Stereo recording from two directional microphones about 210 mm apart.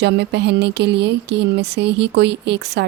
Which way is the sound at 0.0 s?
55° right (ahead or behind).